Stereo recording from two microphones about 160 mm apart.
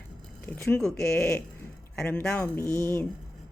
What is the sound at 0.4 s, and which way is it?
Speech, 15° left (ahead or behind).